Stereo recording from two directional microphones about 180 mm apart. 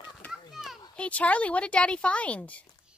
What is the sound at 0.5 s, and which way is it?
Children playing, centre (ahead or behind).